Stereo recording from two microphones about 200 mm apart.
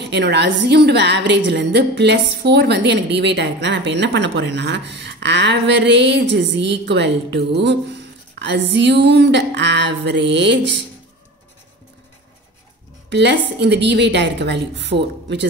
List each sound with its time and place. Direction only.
0.0 s a woman's voice: 60° right (ahead or behind)
13.1 s a woman's voice: 60° right (ahead or behind)